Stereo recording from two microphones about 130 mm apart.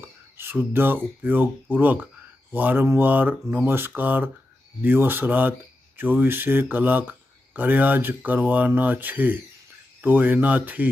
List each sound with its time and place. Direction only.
0.3 s speech: 15° right (ahead or behind)